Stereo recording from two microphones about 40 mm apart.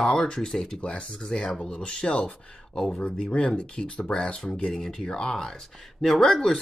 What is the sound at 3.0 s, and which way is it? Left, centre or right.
Speech, left.